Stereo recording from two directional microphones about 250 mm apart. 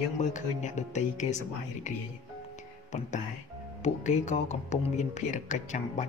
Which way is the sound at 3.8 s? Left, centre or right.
Left.